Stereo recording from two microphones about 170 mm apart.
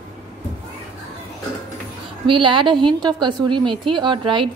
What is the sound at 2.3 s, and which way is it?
A woman's voice, 30° right (ahead or behind).